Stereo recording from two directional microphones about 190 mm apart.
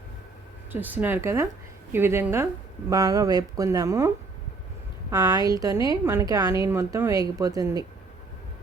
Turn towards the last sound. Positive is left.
turn(degrees=-20)  # may be behind; listen again after turning